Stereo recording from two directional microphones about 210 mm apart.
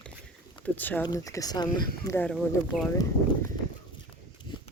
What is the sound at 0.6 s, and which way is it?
Speech, 10° left (ahead or behind).